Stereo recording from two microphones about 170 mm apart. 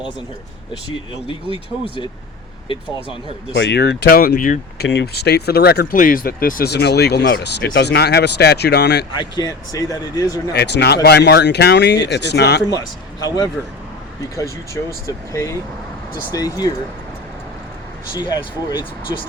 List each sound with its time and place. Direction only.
1.3 s speech: 30° left (ahead or behind)
3.5 s speech: 85° left; by 4.6 s 50° left (ahead or behind)
4.8 s speech: 75° left (ahead or behind)
9.1 s speech: 25° left (ahead or behind)
10.5 s speech: 80° left
12.6 s speech: 25° left (ahead or behind)
18.1 s speech: 25° left (ahead or behind)